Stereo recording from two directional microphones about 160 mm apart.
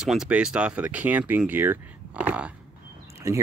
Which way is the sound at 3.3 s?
20° right (ahead or behind).